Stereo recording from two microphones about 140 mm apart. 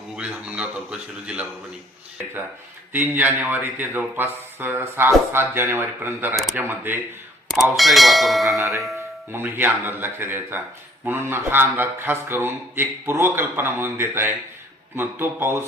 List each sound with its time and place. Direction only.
0.2 s a man's voice: 10° right (ahead or behind)
2.9 s a man's voice: 15° right (ahead or behind)
7.5 s speech: centre (ahead or behind)
8.5 s a man's voice: 20° right (ahead or behind)